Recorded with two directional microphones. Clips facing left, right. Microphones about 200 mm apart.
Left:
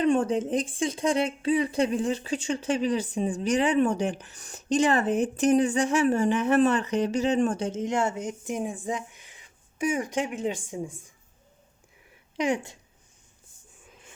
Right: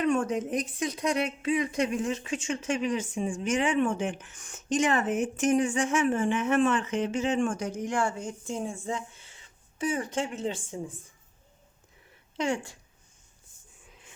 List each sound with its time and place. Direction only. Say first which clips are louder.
0.0 s speech: left 3 dB; 30° left (ahead or behind); by 11.0 s 15° left (ahead or behind)
12.4 s speech: left 3 dB; 15° left (ahead or behind)